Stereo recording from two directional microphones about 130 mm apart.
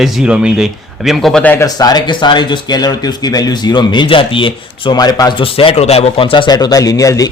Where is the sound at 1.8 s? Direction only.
30° left (ahead or behind).